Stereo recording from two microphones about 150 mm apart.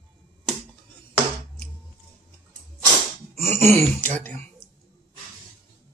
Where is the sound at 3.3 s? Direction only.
45° right (ahead or behind).